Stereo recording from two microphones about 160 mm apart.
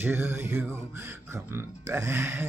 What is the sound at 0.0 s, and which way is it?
Speech, 15° right (ahead or behind).